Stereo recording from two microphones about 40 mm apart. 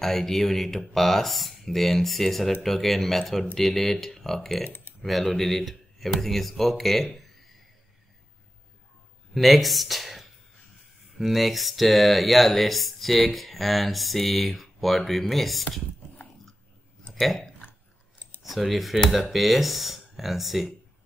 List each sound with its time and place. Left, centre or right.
0.0 s speech: centre
4.6 s typing: left
5.0 s speech: centre
9.3 s speech: centre
17.1 s speech: centre